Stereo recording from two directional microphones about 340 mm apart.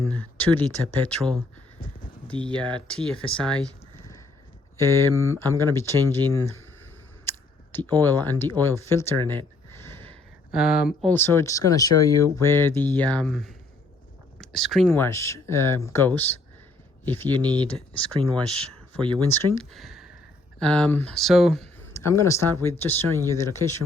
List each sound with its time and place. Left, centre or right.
0.0 s speech: centre
4.8 s speech: centre
7.3 s a sound: centre
8.0 s speech: centre
18.2 s speech: centre
19.7 s a sound: centre
20.6 s speech: centre